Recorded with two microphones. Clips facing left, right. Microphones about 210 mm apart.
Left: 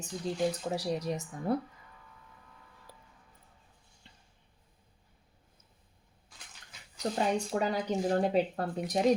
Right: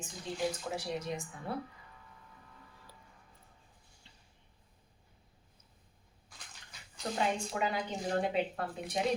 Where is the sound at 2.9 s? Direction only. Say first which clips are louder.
Left 3 dB; 55° left (ahead or behind).